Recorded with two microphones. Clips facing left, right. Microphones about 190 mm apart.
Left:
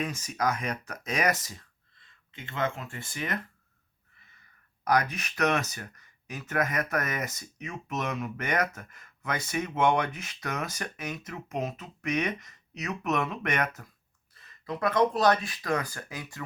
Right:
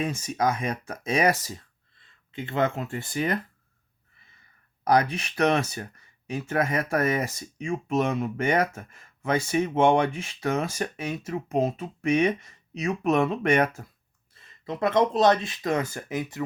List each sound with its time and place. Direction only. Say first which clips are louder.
0.0 s speech: right 4 dB; 30° right (ahead or behind)
4.9 s speech: right 4 dB; 30° right (ahead or behind)